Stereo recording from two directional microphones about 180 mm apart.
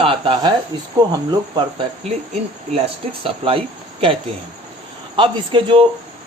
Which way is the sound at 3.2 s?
30° right (ahead or behind).